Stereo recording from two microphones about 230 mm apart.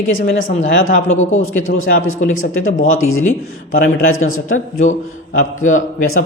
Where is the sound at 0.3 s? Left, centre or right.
Left.